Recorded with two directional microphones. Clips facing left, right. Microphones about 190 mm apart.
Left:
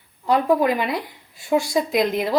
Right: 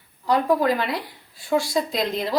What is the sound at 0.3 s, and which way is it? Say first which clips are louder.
Speech: left 2 dB; 20° left (ahead or behind).